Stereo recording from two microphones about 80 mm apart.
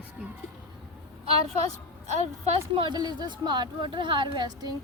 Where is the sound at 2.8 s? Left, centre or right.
Right.